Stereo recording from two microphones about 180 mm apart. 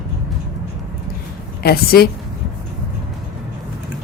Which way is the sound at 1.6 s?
60° left (ahead or behind).